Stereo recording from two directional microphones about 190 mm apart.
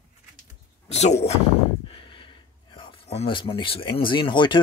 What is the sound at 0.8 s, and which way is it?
Speech, 35° left (ahead or behind).